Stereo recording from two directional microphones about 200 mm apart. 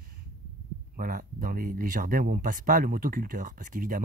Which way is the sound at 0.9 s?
45° right (ahead or behind).